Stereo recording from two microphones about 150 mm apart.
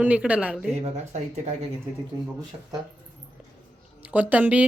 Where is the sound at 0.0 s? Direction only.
10° right (ahead or behind).